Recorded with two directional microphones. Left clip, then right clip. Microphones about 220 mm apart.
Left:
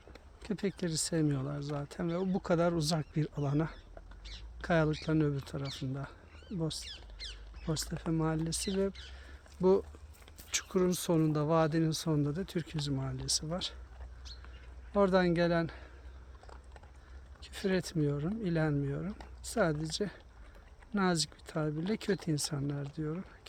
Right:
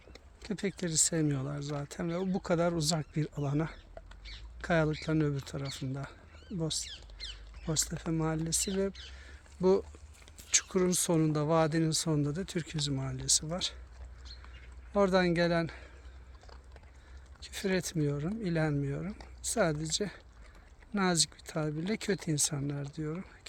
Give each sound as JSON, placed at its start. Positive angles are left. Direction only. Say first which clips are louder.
{"t": 0.4, "sound": "speech", "louder": "even", "side_deg": 0}
{"t": 4.2, "sound": "a sound", "louder": "left 1 dB", "side_deg": 55}
{"t": 4.6, "sound": "speech", "louder": "right 1 dB", "side_deg": 0}
{"t": 6.8, "sound": "speech", "louder": "right 1 dB", "side_deg": 35}
{"t": 7.6, "sound": "speech", "louder": "right 3 dB", "side_deg": -5}
{"t": 9.1, "sound": "a sound", "louder": "even", "side_deg": -5}
{"t": 10.5, "sound": "speech", "louder": "right 2 dB", "side_deg": -10}
{"t": 14.9, "sound": "speech", "louder": "right 1 dB", "side_deg": -5}
{"t": 17.4, "sound": "speech", "louder": "right 1 dB", "side_deg": 0}